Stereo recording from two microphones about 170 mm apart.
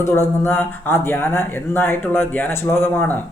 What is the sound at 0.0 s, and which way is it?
Speech, 15° left (ahead or behind).